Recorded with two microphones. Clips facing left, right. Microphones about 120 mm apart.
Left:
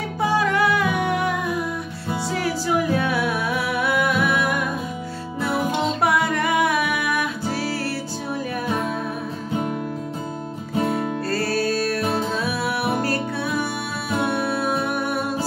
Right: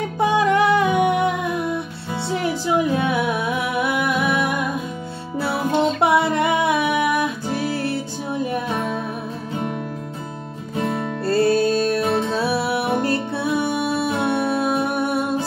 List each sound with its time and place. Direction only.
0.2 s music: 20° right (ahead or behind)
5.9 s music: 25° right (ahead or behind)
10.9 s music: 25° right (ahead or behind)